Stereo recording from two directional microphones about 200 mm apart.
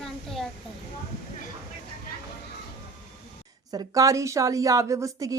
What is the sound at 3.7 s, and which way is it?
A woman's voice, 15° right (ahead or behind).